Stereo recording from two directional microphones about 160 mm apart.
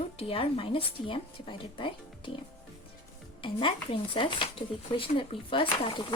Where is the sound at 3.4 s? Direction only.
30° left (ahead or behind).